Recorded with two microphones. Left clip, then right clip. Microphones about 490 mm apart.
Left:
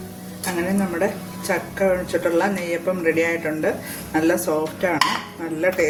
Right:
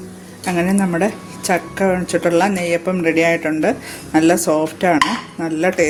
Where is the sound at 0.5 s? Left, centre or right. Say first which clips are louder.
Right 5 dB; centre.